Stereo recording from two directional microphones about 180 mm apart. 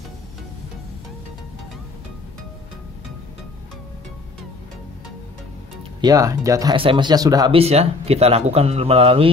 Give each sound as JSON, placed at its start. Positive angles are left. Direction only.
{"t": 5.9, "sound": "speech", "side_deg": -20}
{"t": 7.5, "sound": "speech", "side_deg": -35}